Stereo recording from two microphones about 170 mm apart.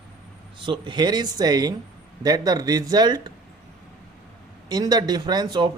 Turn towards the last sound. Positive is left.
turn(degrees=-25)  # may be behind; listen again after turning